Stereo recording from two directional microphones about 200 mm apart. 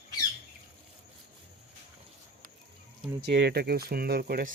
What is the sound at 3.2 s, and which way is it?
Speech, 55° right (ahead or behind).